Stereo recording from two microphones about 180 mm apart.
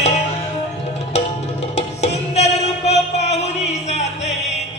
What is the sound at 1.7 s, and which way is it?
Music, 35° left (ahead or behind).